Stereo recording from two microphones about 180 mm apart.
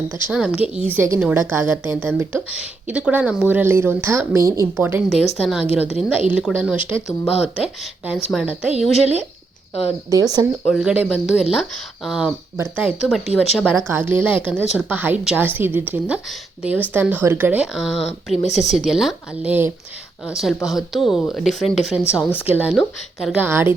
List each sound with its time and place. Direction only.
0.3 s a woman's voice: 5° right (ahead or behind)
5.3 s speech: centre (ahead or behind)
10.1 s speech: 20° right (ahead or behind)
10.7 s a woman's voice: 5° right (ahead or behind)
13.2 s speech: 35° left (ahead or behind)
13.7 s a woman's voice: 15° right (ahead or behind)
18.4 s speech: 40° left (ahead or behind)
18.8 s a woman's voice: centre (ahead or behind)